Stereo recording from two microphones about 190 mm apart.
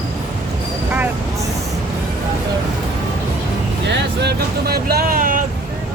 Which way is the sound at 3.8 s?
60° right (ahead or behind).